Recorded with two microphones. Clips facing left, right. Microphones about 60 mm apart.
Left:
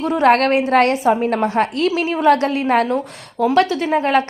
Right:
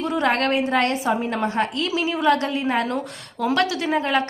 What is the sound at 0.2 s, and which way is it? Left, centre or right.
Speech, left.